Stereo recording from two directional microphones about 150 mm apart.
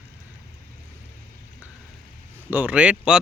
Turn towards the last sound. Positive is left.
turn(degrees=-5)  # may be behind; listen again after turning